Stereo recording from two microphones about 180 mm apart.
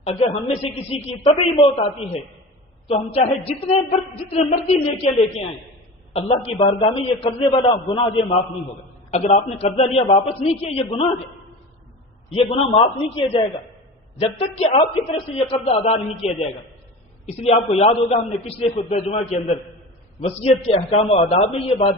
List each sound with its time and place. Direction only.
0.0 s a man's voice: 35° left (ahead or behind)
6.1 s a man's voice: 35° left (ahead or behind)
12.3 s a man's voice: 35° left (ahead or behind)
14.6 s a man's voice: 35° left (ahead or behind)